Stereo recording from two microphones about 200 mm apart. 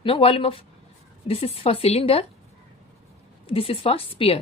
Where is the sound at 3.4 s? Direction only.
30° left (ahead or behind).